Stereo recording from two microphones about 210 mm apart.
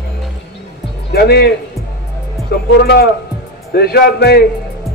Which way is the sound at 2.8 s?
45° left (ahead or behind).